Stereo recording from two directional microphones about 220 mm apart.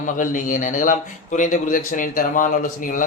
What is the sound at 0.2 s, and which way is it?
Speech, 35° left (ahead or behind).